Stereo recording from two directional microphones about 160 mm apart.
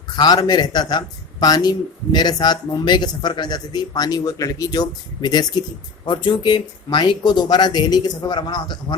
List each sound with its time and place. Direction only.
0.2 s speech: 25° left (ahead or behind)